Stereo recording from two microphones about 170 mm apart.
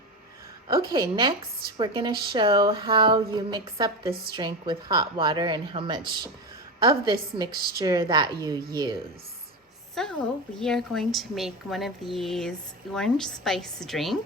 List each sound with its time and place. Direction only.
0.9 s speech: 25° right (ahead or behind)
9.9 s a woman's voice: 5° left (ahead or behind)